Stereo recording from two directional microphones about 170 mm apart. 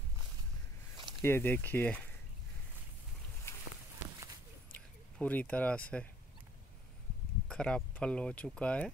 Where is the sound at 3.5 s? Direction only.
15° left (ahead or behind).